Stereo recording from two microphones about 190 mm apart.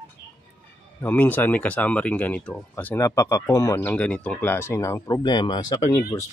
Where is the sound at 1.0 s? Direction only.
10° left (ahead or behind).